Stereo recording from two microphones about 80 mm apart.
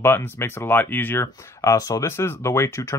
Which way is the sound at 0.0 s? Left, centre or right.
Left.